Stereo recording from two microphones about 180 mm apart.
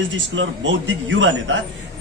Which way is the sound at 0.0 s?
90° right.